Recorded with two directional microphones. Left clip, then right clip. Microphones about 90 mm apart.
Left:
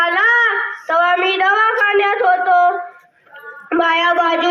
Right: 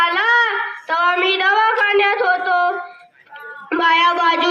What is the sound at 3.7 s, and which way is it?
Meow, 25° right (ahead or behind).